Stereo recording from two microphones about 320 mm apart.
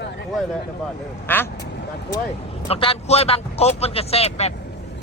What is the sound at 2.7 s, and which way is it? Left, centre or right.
Speech, centre.